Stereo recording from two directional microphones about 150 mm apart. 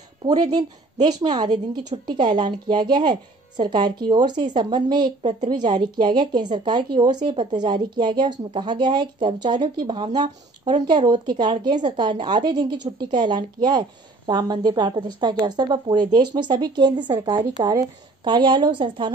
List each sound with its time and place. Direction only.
0.4 s a woman's voice: 25° right (ahead or behind)